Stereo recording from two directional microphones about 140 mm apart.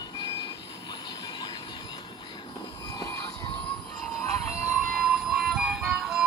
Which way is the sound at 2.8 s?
25° left (ahead or behind).